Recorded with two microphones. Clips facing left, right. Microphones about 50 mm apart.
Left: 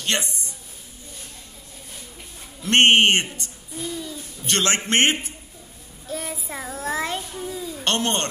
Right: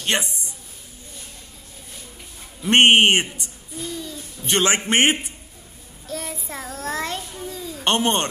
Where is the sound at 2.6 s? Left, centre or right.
Centre.